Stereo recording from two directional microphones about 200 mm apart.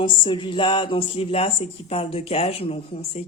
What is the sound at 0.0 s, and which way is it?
Speech, 25° left (ahead or behind).